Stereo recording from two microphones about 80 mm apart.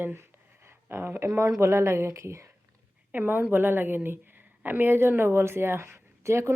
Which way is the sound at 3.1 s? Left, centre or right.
Right.